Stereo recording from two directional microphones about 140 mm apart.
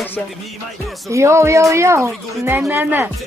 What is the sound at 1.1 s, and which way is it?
A woman's voice, 20° right (ahead or behind).